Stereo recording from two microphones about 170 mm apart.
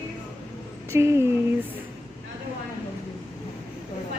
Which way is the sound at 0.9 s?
15° right (ahead or behind).